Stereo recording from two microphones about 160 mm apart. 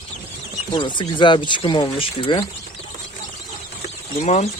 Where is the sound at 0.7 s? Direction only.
30° left (ahead or behind).